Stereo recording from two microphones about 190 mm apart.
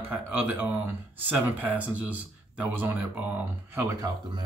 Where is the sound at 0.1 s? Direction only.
10° right (ahead or behind).